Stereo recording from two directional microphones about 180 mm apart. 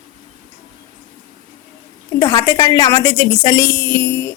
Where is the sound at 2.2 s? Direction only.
20° left (ahead or behind).